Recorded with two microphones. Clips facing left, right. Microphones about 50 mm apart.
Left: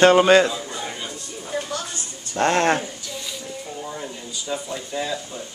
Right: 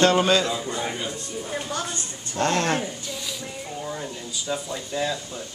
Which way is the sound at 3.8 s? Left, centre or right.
Centre.